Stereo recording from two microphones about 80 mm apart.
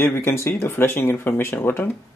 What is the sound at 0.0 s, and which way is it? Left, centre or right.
Speech, left.